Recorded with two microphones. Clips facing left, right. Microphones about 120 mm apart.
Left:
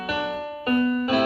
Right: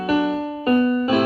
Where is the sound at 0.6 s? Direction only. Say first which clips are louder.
Right 4 dB; 25° right (ahead or behind).